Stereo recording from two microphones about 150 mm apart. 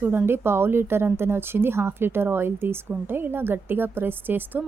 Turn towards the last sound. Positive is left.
turn(degrees=-10)  # may be behind; listen again after turning